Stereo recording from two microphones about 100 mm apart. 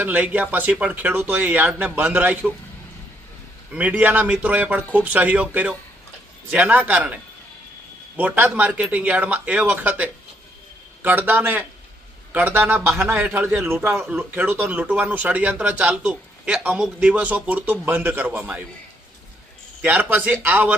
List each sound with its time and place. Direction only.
0.0 s speech: 15° right (ahead or behind)
3.7 s a man's voice: 15° right (ahead or behind)
19.8 s speech: 15° right (ahead or behind)